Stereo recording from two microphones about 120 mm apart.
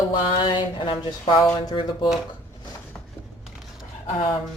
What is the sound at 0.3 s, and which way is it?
Speech, 40° left (ahead or behind).